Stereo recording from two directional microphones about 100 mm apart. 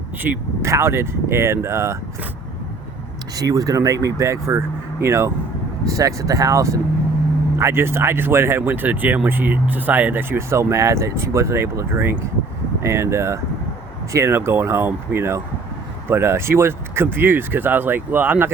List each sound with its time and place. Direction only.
0.2 s speech: 20° right (ahead or behind)
3.3 s speech: 35° right (ahead or behind); by 18.5 s 20° right (ahead or behind)